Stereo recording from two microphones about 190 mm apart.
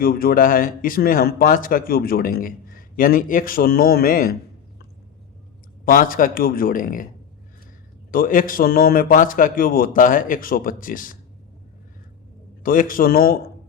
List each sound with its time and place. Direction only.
0.0 s speech: 50° left (ahead or behind)
5.8 s speech: 45° left (ahead or behind)
8.1 s speech: 45° left (ahead or behind)
12.6 s speech: 45° left (ahead or behind)